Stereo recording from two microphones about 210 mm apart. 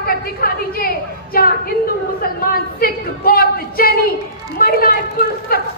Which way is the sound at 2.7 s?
45° left (ahead or behind).